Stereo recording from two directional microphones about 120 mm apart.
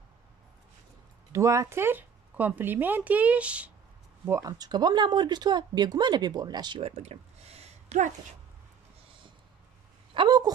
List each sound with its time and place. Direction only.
1.3 s speech: 25° right (ahead or behind); by 3.7 s 10° right (ahead or behind)
4.3 s speech: 30° right (ahead or behind)
6.8 s a woman's voice: 60° right (ahead or behind); by 8.4 s 75° right (ahead or behind)
10.1 s speech: 40° right (ahead or behind)